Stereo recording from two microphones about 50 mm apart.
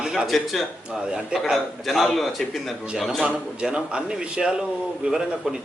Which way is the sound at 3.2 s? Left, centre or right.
Right.